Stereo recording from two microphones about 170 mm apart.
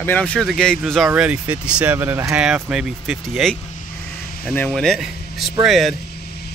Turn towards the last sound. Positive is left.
turn(degrees=0)  # may be behind; listen again after turning